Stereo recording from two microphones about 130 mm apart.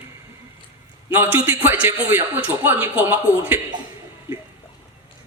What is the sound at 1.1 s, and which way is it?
A man's voice, 15° right (ahead or behind).